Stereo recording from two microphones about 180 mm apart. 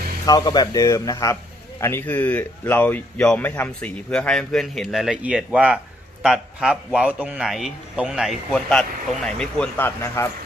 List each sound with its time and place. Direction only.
0.3 s a man's voice: 20° left (ahead or behind)